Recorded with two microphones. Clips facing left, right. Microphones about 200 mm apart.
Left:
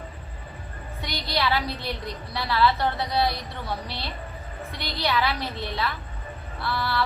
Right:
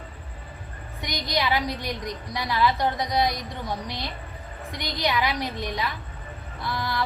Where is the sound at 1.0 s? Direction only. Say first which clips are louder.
Even; 15° right (ahead or behind).